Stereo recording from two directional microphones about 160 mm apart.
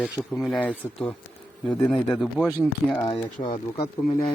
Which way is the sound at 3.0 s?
30° left (ahead or behind).